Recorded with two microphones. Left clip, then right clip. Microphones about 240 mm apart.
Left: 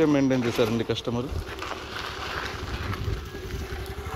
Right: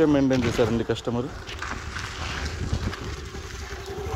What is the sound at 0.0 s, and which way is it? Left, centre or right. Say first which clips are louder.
Speech: right 2 dB; centre.